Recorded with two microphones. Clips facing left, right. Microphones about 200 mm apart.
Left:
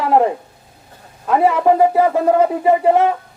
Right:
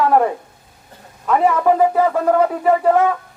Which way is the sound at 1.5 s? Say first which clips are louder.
Left 2 dB; 15° left (ahead or behind).